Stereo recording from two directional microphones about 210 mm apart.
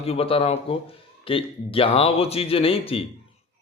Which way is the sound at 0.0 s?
30° left (ahead or behind).